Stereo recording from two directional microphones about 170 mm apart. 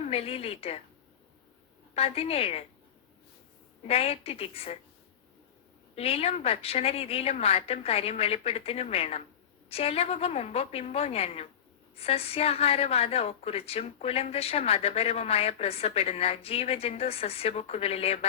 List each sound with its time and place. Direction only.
0.0 s a woman's voice: 35° left (ahead or behind)
2.0 s a woman's voice: 35° left (ahead or behind)
3.8 s a woman's voice: 35° left (ahead or behind)
6.0 s a woman's voice: 35° left (ahead or behind)